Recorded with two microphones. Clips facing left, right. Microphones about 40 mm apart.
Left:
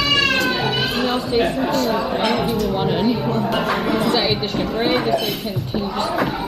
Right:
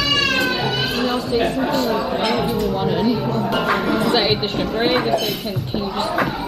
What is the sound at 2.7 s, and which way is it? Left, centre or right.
Speech, centre.